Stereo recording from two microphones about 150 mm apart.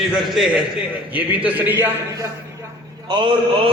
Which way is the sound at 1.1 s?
10° right (ahead or behind).